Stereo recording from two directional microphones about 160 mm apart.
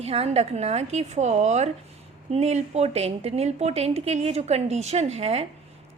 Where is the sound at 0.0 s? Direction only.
40° right (ahead or behind).